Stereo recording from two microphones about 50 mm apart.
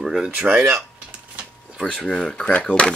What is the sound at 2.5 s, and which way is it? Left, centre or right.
Speech, left.